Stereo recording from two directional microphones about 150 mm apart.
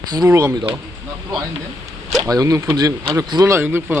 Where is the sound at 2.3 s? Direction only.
25° right (ahead or behind).